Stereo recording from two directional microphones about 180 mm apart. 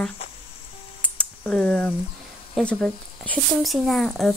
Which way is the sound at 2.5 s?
5° left (ahead or behind).